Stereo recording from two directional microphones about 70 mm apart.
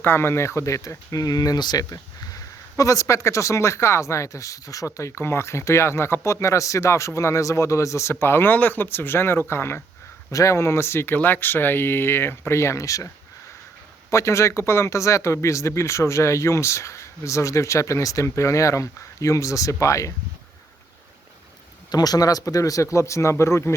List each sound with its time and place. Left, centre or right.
0.0 s speech: left
8.2 s speech: left
10.3 s speech: left
14.1 s speech: left
21.9 s speech: left